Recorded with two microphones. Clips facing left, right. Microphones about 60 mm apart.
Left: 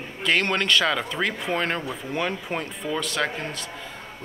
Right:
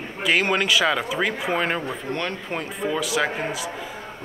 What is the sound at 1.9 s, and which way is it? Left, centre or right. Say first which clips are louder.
A man's voice: even; centre.